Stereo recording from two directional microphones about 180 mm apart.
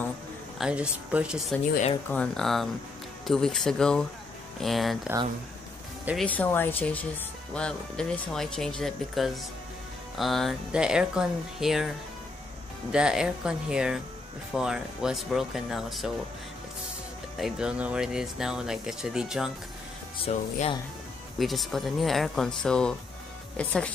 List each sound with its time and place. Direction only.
0.6 s speech: 5° right (ahead or behind)
6.2 s speech: 10° left (ahead or behind)
12.9 s speech: 5° right (ahead or behind)
17.4 s speech: 5° right (ahead or behind)
20.2 s speech: 35° left (ahead or behind)
21.4 s speech: centre (ahead or behind)